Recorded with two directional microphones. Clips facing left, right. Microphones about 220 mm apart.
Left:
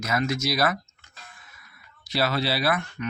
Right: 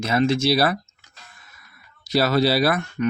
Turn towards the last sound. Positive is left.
turn(degrees=-40)  # may be behind; listen again after turning